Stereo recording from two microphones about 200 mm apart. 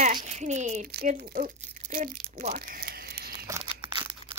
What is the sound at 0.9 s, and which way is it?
Speech, 50° right (ahead or behind).